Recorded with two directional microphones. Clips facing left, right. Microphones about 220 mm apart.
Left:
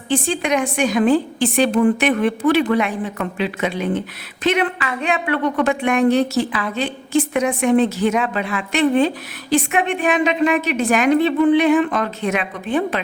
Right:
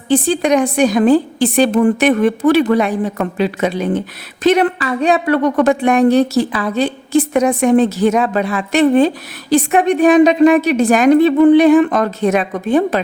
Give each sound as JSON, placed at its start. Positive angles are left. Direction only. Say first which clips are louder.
{"t": 0.1, "sound": "a woman's voice", "louder": "right 6 dB", "side_deg": -35}